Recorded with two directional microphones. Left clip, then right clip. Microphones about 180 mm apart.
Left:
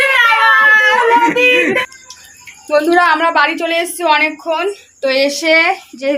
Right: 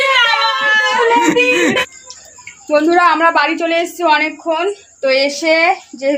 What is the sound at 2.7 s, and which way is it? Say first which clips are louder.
A woman's voice: even; centre (ahead or behind).